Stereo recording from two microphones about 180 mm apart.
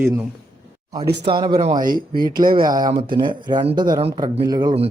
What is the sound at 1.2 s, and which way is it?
Speech, 25° right (ahead or behind).